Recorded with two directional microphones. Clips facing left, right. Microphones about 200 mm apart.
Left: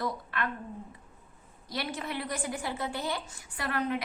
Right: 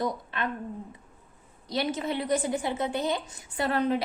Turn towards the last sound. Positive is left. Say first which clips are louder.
# right 6 dB
turn(degrees=-30)  # may be behind; listen again after turning